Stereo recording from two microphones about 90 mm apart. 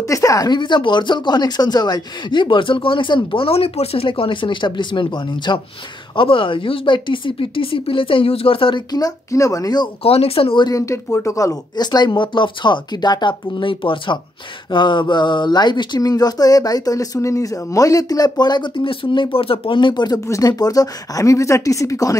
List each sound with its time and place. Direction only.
0.0 s speech: 40° left (ahead or behind)
0.5 s speech: 60° left (ahead or behind)
6.1 s speech: 80° left
8.9 s speech: 40° left (ahead or behind)
10.0 s speech: 90° left
10.6 s speech: 40° left (ahead or behind)
20.2 s speech: 40° left (ahead or behind)